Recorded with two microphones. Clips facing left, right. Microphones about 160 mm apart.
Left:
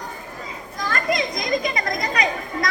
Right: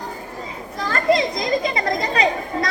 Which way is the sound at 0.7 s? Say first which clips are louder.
Right 5 dB; 30° right (ahead or behind).